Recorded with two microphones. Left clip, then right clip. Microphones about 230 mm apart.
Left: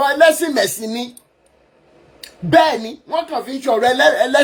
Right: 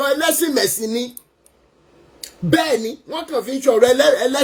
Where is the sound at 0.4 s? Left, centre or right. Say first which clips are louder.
Left 1 dB; centre.